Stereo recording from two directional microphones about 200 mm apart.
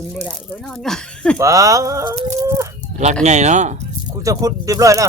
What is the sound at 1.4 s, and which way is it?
Speech, 15° right (ahead or behind).